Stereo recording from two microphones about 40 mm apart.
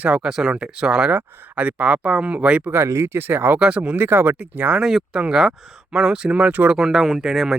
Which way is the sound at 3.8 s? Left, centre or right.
Right.